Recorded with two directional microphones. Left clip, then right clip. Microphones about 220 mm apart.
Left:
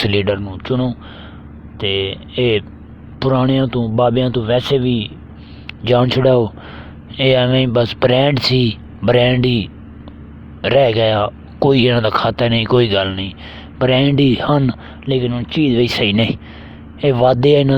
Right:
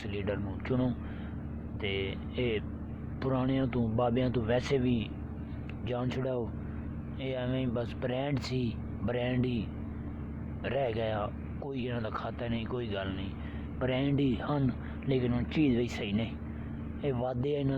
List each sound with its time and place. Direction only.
0.0 s speech: 45° left (ahead or behind)